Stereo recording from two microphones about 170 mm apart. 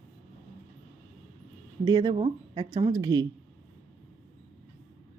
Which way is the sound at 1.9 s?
25° right (ahead or behind).